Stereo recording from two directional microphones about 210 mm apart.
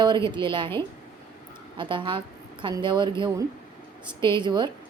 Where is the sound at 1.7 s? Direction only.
25° right (ahead or behind).